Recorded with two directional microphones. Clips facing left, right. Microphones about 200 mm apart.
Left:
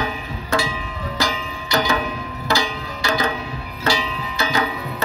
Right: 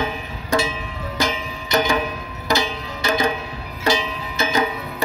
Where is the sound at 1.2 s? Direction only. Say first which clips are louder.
Right 2 dB; 20° right (ahead or behind).